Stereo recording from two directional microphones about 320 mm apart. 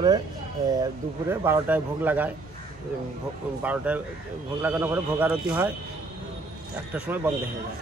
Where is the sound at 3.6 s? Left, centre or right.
Centre.